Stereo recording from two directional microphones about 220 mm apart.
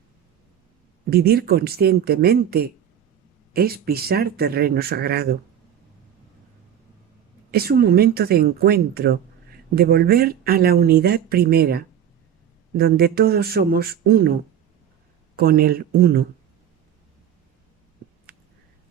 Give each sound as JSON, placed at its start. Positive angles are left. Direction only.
{"t": 1.1, "sound": "speech", "side_deg": -45}
{"t": 7.5, "sound": "speech", "side_deg": -45}
{"t": 15.4, "sound": "speech", "side_deg": -40}
{"t": 18.3, "sound": "a sound", "side_deg": -45}